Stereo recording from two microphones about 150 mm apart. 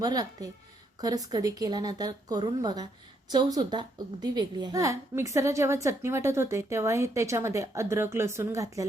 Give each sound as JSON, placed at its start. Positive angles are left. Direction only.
{"t": 0.0, "sound": "a woman's voice", "side_deg": -25}